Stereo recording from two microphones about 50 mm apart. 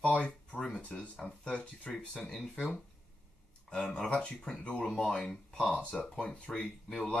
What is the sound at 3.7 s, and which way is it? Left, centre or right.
Speech, centre.